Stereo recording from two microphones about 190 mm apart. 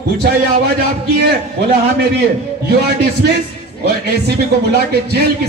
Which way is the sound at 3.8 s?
60° right (ahead or behind).